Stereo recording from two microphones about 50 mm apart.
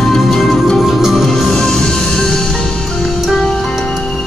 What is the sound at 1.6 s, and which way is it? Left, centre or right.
Music, centre.